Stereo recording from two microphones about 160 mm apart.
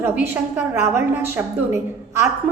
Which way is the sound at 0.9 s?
15° right (ahead or behind).